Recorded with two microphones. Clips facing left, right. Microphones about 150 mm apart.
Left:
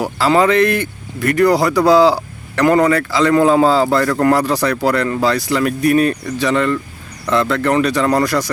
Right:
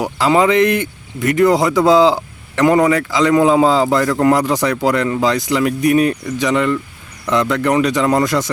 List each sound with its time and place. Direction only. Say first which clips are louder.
0.0 s speech: even; 20° right (ahead or behind)